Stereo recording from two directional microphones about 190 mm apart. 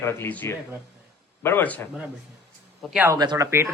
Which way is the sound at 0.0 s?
10° left (ahead or behind).